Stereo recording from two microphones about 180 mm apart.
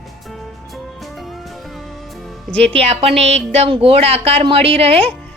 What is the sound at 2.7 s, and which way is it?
A woman's voice, 35° right (ahead or behind).